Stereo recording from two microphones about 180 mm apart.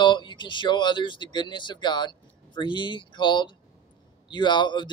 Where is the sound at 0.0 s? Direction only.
25° left (ahead or behind).